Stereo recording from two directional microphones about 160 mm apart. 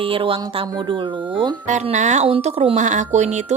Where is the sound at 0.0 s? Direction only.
35° right (ahead or behind).